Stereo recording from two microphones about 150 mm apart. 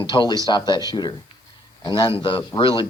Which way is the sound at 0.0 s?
30° left (ahead or behind).